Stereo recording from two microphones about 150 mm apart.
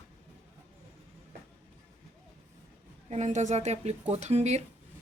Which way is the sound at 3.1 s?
55° right (ahead or behind).